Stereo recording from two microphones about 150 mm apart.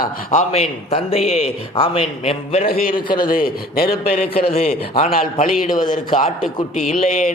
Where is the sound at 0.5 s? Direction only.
45° left (ahead or behind).